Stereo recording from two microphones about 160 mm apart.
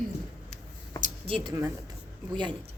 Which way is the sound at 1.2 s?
35° right (ahead or behind).